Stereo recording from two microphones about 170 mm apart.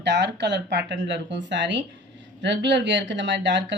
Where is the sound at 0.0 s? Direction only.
90° right.